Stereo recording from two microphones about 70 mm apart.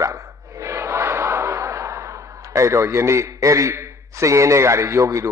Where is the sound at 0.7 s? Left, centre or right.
Right.